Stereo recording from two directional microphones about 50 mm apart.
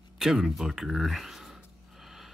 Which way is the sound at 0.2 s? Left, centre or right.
Centre.